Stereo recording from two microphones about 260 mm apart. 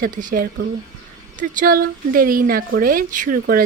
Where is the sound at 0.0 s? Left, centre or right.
Right.